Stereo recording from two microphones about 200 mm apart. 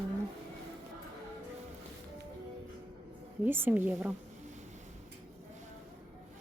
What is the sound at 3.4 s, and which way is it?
Speech, 10° right (ahead or behind).